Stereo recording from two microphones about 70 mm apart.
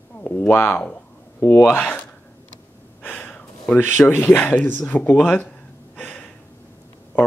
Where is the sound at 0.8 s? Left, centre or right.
Left.